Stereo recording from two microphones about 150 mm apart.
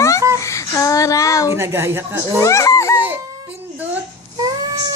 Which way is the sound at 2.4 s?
20° left (ahead or behind).